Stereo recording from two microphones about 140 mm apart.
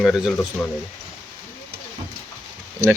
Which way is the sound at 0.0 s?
Centre (ahead or behind).